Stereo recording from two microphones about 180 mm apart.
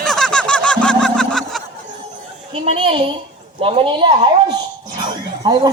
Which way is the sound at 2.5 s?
30° right (ahead or behind).